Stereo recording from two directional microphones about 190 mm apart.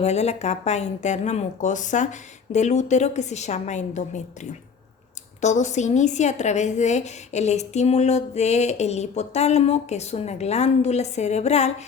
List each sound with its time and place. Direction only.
0.0 s a woman's voice: 35° left (ahead or behind)
5.4 s a woman's voice: 40° left (ahead or behind)